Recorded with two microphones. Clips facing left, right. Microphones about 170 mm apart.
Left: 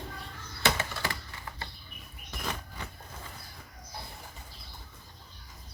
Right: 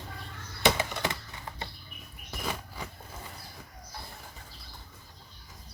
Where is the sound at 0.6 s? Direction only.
15° right (ahead or behind).